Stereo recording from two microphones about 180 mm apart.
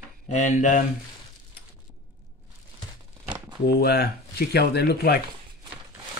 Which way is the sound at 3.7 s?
60° left (ahead or behind).